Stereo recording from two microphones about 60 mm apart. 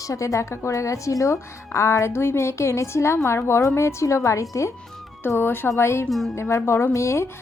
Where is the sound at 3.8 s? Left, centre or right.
Left.